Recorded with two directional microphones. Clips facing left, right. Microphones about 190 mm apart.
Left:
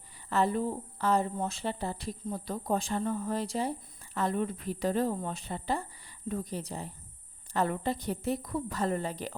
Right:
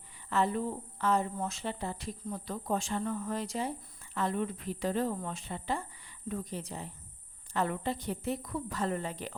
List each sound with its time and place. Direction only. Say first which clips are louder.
0.3 s speech: left 2 dB; 35° left (ahead or behind)